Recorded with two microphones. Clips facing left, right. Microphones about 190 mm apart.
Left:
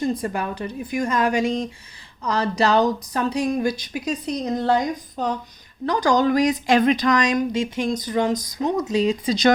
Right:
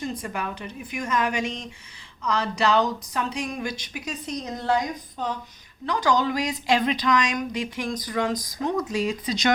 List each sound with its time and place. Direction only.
0.0 s speech: 35° left (ahead or behind)